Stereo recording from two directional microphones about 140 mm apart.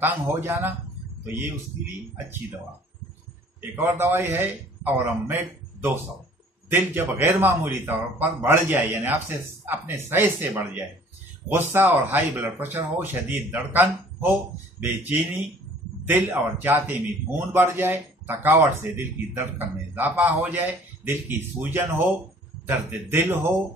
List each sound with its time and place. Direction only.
0.0 s speech: 15° right (ahead or behind)
3.7 s speech: 15° right (ahead or behind)